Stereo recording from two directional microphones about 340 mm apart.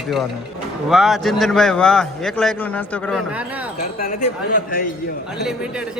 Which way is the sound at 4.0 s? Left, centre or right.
Left.